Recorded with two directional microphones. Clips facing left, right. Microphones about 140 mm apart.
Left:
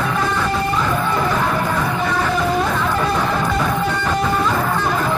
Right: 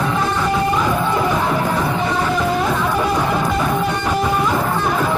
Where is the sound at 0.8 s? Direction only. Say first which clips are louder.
Right 1 dB; 10° right (ahead or behind).